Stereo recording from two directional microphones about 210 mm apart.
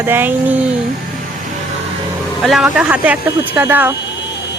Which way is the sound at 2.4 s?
5° right (ahead or behind).